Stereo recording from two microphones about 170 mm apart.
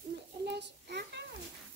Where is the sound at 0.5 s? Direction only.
85° right.